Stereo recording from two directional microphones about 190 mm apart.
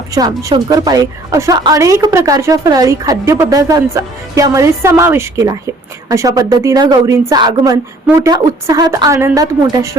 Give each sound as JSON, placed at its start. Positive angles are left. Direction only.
{"t": 0.1, "sound": "a woman's voice", "side_deg": -20}